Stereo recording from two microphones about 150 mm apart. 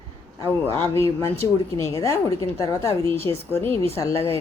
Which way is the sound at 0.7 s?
20° left (ahead or behind).